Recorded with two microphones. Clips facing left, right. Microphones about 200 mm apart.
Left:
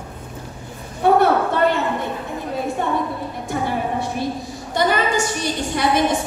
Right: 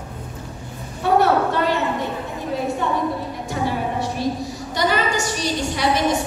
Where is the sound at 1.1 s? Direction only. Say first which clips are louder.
Right 3 dB; 55° left (ahead or behind).